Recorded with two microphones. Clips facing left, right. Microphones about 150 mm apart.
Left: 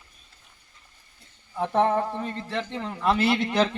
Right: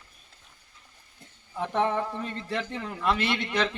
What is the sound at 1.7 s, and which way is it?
A man's voice, 40° left (ahead or behind).